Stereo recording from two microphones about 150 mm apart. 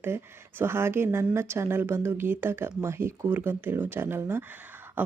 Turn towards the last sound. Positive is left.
turn(degrees=-15)  # may be behind; listen again after turning